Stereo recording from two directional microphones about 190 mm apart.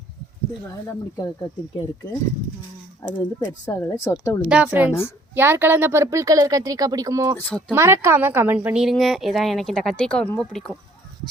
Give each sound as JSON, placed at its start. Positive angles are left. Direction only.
{"t": 3.0, "sound": "speech", "side_deg": 15}
{"t": 4.4, "sound": "speech", "side_deg": -5}
{"t": 7.3, "sound": "speech", "side_deg": 10}
{"t": 7.7, "sound": "a woman's voice", "side_deg": -15}